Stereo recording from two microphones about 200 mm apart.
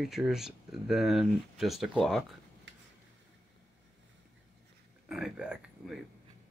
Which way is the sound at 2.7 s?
65° right (ahead or behind).